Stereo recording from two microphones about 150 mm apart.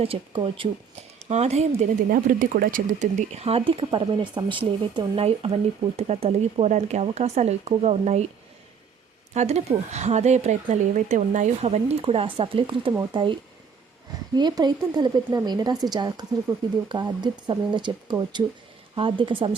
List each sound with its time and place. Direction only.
0.0 s speech: 40° right (ahead or behind)
1.2 s speech: 45° right (ahead or behind)
2.0 s speech: 70° right (ahead or behind); by 8.3 s 50° right (ahead or behind)
9.3 s speech: 50° right (ahead or behind)
14.3 s speech: 30° right (ahead or behind)